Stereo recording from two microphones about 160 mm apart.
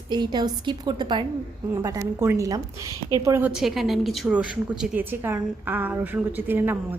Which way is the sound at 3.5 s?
5° right (ahead or behind).